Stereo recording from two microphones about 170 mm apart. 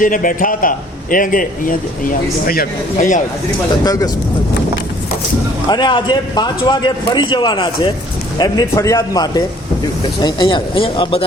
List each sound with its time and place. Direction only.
0.0 s a man's voice: 50° left (ahead or behind)
3.8 s a man's voice: 20° left (ahead or behind)
5.6 s a man's voice: 25° left (ahead or behind)